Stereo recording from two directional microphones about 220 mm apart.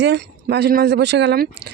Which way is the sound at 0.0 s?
50° right (ahead or behind).